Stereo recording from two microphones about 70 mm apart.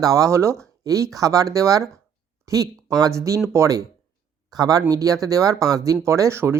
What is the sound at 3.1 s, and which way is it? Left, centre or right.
Speech, right.